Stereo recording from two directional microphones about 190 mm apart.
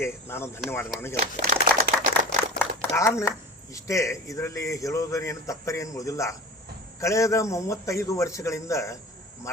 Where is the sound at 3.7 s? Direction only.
15° left (ahead or behind).